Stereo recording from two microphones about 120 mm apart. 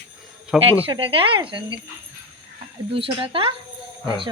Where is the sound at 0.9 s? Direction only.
50° right (ahead or behind).